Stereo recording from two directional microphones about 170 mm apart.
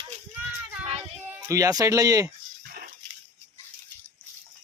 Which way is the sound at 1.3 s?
15° right (ahead or behind).